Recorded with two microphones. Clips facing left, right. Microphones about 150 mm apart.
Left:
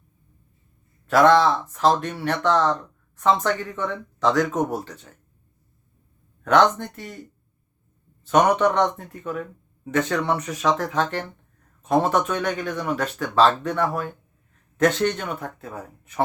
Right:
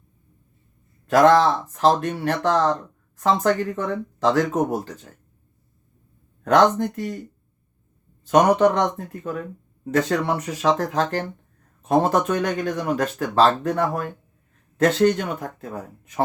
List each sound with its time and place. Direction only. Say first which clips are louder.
1.1 s speech: right 1 dB; 40° right (ahead or behind)
6.4 s speech: right 1 dB; 40° right (ahead or behind)
8.2 s speech: right 2 dB; 40° right (ahead or behind)